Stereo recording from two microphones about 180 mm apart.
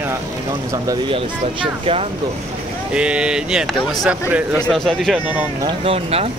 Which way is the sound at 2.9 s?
5° right (ahead or behind).